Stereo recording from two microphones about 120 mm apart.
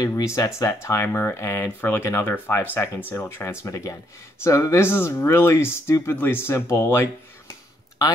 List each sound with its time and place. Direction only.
0.0 s speech: 25° left (ahead or behind)